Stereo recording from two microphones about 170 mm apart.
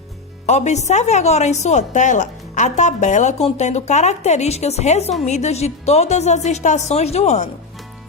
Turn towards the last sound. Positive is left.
turn(degrees=40)  # may be behind; listen again after turning